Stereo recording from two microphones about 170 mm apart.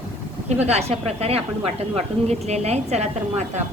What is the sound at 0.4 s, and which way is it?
A woman's voice, 40° right (ahead or behind).